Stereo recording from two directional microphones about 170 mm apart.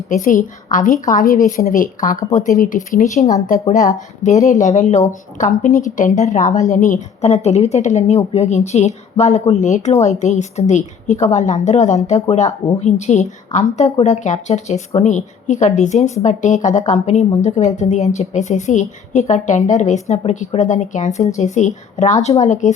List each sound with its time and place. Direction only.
0.1 s a woman's voice: 50° left (ahead or behind)